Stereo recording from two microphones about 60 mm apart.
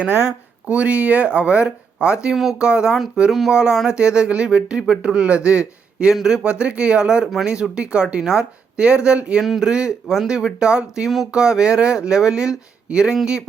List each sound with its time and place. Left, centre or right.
0.7 s speech: right
2.3 s speech: centre
2.6 s speech: centre
9.4 s speech: centre
9.6 s speech: centre